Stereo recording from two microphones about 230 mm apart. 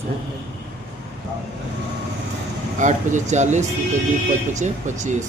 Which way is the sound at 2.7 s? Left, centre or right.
Right.